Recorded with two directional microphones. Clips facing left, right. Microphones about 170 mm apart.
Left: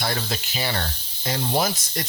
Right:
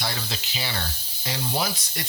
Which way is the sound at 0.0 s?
50° left (ahead or behind).